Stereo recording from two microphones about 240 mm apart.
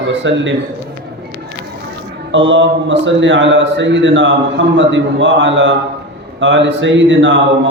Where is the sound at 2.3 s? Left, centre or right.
Right.